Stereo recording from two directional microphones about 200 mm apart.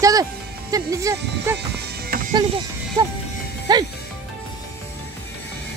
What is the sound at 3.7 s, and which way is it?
Speech, 20° right (ahead or behind).